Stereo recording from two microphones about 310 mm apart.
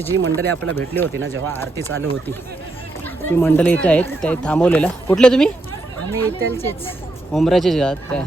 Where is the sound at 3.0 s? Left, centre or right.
Centre.